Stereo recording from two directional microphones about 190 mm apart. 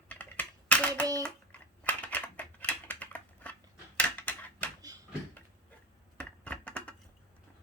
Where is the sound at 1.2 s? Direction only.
5° left (ahead or behind).